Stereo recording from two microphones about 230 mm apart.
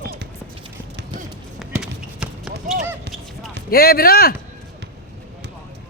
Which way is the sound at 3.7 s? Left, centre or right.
Left.